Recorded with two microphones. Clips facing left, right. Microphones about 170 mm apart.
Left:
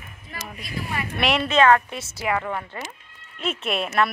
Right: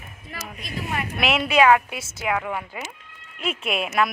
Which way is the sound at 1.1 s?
5° right (ahead or behind).